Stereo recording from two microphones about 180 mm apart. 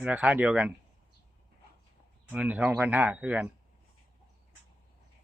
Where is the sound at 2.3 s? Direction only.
5° right (ahead or behind).